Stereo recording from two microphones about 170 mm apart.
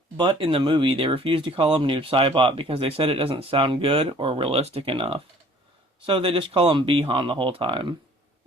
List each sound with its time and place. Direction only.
0.2 s speech: 30° right (ahead or behind)